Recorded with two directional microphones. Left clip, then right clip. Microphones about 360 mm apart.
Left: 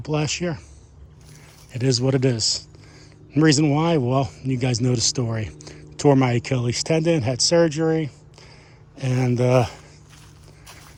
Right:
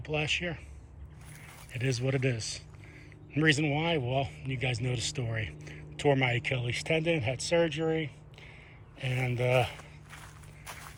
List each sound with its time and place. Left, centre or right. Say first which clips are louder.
0.0 s speech: left 5 dB; centre
1.8 s speech: left 10 dB; centre
6.1 s speech: left 9 dB; left